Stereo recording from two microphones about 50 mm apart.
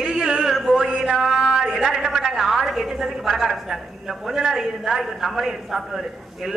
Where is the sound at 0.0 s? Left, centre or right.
Centre.